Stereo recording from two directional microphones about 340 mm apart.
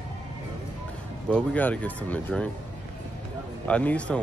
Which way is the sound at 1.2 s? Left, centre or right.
Centre.